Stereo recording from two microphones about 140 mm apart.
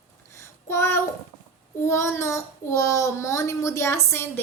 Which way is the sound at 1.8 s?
20° left (ahead or behind).